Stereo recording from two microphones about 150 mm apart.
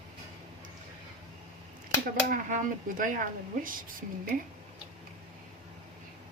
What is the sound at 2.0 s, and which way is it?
Speech, 65° right (ahead or behind).